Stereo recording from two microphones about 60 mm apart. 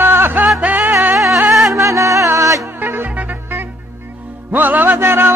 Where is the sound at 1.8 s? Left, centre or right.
Right.